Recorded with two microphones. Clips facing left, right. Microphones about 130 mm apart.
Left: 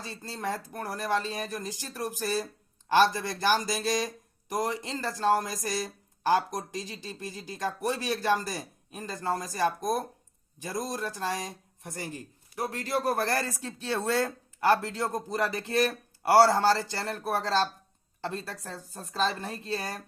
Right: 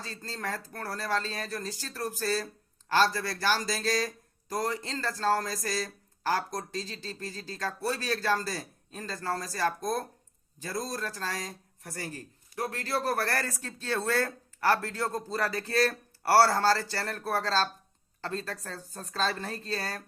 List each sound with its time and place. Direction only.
0.0 s speech: 15° left (ahead or behind)